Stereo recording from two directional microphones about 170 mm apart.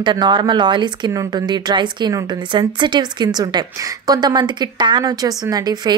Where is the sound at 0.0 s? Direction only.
25° right (ahead or behind).